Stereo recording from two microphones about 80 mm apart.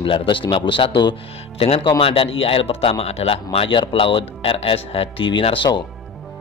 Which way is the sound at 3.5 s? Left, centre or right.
Left.